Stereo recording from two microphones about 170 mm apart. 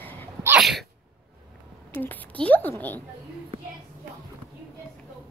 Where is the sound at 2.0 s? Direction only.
10° left (ahead or behind).